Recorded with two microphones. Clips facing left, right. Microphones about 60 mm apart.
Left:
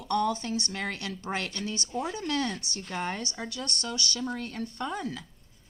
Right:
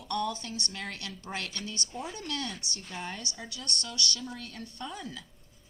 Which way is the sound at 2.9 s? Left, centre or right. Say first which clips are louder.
Left 7 dB; left.